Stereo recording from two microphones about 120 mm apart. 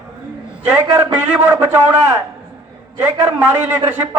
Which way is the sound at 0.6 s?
15° right (ahead or behind).